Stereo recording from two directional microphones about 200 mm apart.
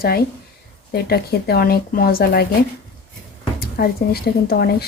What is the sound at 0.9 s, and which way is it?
Cutlery, 50° left (ahead or behind).